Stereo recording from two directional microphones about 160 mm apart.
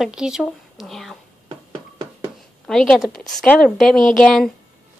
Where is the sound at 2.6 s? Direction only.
Centre (ahead or behind).